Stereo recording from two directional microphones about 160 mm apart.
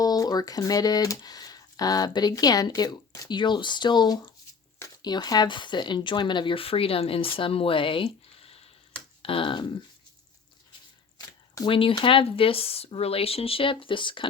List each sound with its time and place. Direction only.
0.0 s speech: 25° left (ahead or behind)
11.2 s speech: 25° left (ahead or behind)